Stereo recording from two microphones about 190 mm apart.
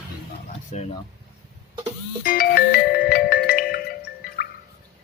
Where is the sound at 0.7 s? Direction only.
35° left (ahead or behind).